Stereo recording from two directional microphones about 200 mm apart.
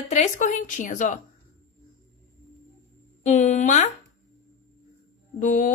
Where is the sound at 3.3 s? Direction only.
35° left (ahead or behind).